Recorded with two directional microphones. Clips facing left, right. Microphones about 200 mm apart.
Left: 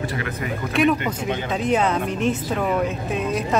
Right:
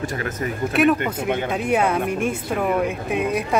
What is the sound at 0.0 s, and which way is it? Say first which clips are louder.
Speech: right 1 dB; 45° right (ahead or behind).